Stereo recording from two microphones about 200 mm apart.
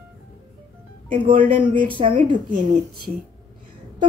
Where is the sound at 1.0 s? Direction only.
25° right (ahead or behind).